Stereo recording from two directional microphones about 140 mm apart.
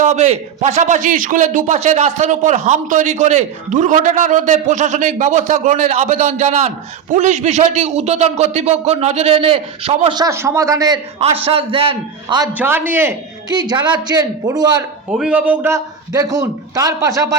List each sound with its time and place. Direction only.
0.0 s a man's voice: 55° right (ahead or behind)
1.6 s a man's voice: 55° right (ahead or behind)
10.2 s a man's voice: 20° right (ahead or behind)
11.2 s a man's voice: 45° right (ahead or behind)
12.5 s a man's voice: 15° right (ahead or behind)
13.5 s a man's voice: 30° right (ahead or behind)
15.1 s a man's voice: 5° right (ahead or behind); by 17.2 s 25° right (ahead or behind)